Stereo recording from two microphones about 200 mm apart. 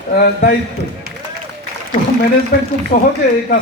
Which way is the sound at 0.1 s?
50° left (ahead or behind).